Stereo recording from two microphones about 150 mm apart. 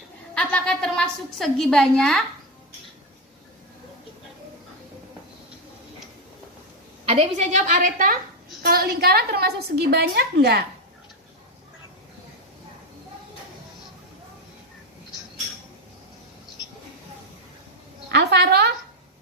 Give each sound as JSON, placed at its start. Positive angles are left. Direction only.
{"t": 0.3, "sound": "a woman's voice", "side_deg": 5}
{"t": 7.0, "sound": "a woman's voice", "side_deg": -45}
{"t": 8.6, "sound": "a woman's voice", "side_deg": -85}
{"t": 18.1, "sound": "a sound", "side_deg": -90}